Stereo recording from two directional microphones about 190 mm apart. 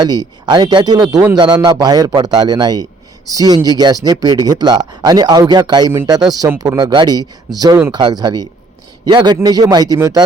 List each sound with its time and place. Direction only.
0.0 s speech: 20° right (ahead or behind)